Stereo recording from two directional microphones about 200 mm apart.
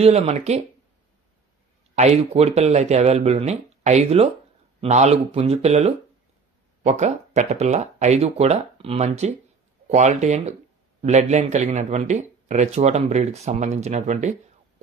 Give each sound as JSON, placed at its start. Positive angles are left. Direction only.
{"t": 0.0, "sound": "speech", "side_deg": -30}
{"t": 2.0, "sound": "speech", "side_deg": -30}